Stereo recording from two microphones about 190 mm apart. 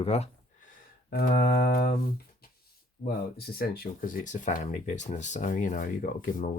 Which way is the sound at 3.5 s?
50° left (ahead or behind).